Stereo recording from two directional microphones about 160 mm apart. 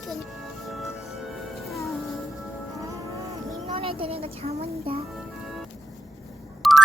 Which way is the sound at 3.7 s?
35° right (ahead or behind).